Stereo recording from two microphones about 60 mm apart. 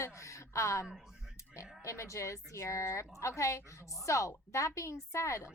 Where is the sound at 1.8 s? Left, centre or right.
Left.